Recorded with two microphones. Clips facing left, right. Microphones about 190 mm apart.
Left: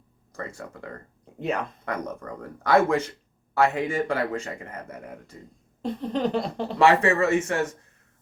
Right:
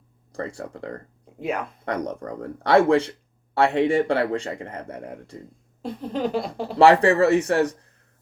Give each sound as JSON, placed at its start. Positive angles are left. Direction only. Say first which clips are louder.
{"t": 0.3, "sound": "speech", "louder": "right 5 dB", "side_deg": -35}
{"t": 1.4, "sound": "speech", "louder": "even", "side_deg": -5}
{"t": 1.8, "sound": "speech", "louder": "right 4 dB", "side_deg": -35}
{"t": 5.8, "sound": "a sound", "louder": "even", "side_deg": -5}
{"t": 6.7, "sound": "speech", "louder": "right 4 dB", "side_deg": -35}